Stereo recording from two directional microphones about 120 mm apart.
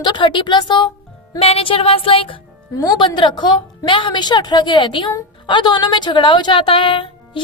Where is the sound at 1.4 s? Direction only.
50° left (ahead or behind).